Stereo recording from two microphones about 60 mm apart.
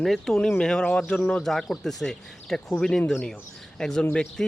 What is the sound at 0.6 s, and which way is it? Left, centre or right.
Speech, centre.